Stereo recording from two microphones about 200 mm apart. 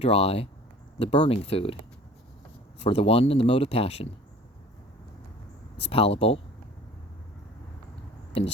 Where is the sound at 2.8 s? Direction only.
30° left (ahead or behind).